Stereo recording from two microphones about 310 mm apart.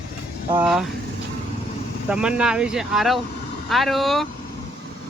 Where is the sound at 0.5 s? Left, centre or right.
Centre.